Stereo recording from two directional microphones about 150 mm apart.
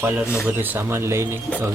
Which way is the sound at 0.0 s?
10° right (ahead or behind).